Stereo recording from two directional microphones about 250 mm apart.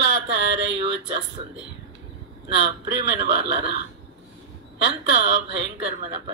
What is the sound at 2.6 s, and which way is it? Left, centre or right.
Speech, right.